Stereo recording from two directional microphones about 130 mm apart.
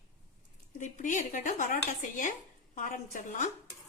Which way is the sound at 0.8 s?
75° left (ahead or behind).